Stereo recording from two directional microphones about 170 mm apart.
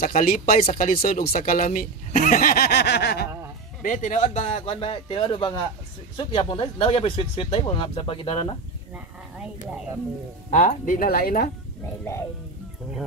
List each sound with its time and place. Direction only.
0.0 s speech: 55° left (ahead or behind)
0.5 s speech: 40° left (ahead or behind)
1.0 s speech: 55° left (ahead or behind); by 3.3 s 80° left
3.8 s speech: 50° left (ahead or behind); by 8.5 s 30° left (ahead or behind)
8.9 s speech: 5° right (ahead or behind)
10.5 s speech: 50° left (ahead or behind)